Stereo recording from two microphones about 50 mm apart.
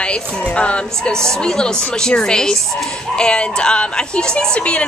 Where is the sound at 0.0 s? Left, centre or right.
Left.